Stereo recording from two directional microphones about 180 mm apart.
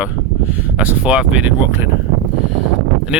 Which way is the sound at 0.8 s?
5° right (ahead or behind).